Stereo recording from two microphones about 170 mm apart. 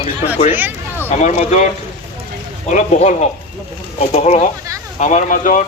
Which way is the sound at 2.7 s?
40° left (ahead or behind).